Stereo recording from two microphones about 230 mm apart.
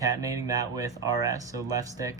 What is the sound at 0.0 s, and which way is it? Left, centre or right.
Speech, centre.